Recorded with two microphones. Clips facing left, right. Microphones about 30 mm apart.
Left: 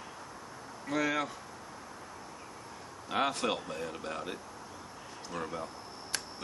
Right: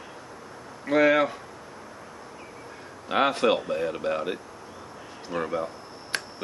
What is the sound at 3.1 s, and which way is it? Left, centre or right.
Speech, right.